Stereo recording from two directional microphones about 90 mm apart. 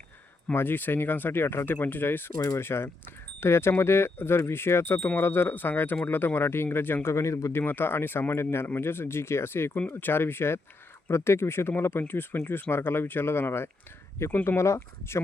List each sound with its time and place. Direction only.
0.5 s speech: 25° left (ahead or behind)
7.6 s speech: 25° left (ahead or behind)